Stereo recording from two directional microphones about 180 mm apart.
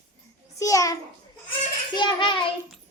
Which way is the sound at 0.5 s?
20° left (ahead or behind).